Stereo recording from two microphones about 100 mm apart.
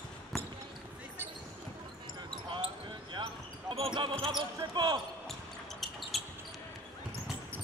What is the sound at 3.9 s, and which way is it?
Basketball bounce, 55° right (ahead or behind).